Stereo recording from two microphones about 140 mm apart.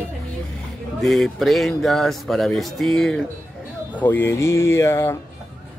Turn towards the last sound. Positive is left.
turn(degrees=20)  # may be behind; listen again after turning